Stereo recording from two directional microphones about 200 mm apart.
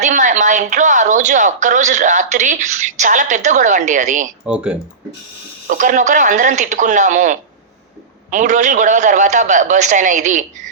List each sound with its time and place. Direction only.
0.0 s a woman's voice: 35° right (ahead or behind)
4.4 s speech: 5° right (ahead or behind)
5.6 s a woman's voice: 40° right (ahead or behind)